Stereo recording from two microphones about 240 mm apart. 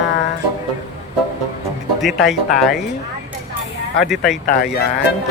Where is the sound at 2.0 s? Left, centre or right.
Centre.